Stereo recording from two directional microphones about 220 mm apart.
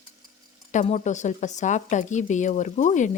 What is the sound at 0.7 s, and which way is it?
A woman's voice, 30° left (ahead or behind).